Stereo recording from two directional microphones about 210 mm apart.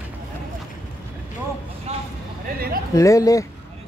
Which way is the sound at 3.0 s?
15° left (ahead or behind).